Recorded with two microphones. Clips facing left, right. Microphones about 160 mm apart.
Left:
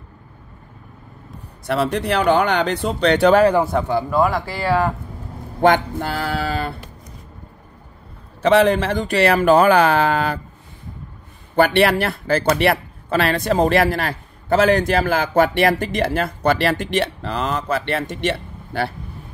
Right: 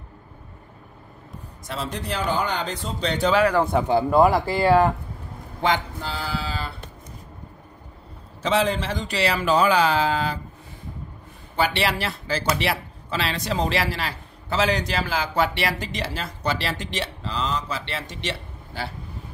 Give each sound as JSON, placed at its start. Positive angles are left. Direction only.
{"t": 1.7, "sound": "speech", "side_deg": 65}
{"t": 3.8, "sound": "speech", "side_deg": -25}
{"t": 5.6, "sound": "speech", "side_deg": 55}
{"t": 8.4, "sound": "speech", "side_deg": 60}
{"t": 11.5, "sound": "speech", "side_deg": 55}